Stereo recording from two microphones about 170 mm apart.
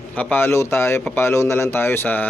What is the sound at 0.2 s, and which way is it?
A man's voice, 10° left (ahead or behind).